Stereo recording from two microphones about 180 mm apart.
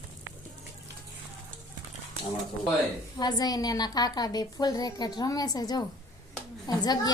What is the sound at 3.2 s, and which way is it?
A child's voice, 20° left (ahead or behind).